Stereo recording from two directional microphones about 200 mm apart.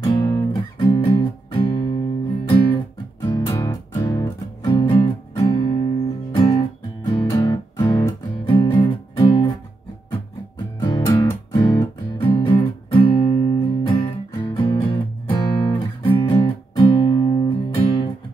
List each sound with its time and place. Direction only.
0.0 s music: 20° left (ahead or behind)
7.1 s music: 20° left (ahead or behind)
10.8 s music: 20° left (ahead or behind)